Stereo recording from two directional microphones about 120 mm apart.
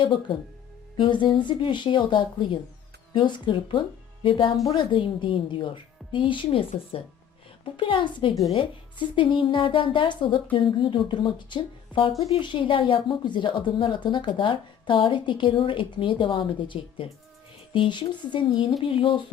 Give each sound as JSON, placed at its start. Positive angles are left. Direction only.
{"t": 0.0, "sound": "a woman's voice", "side_deg": 45}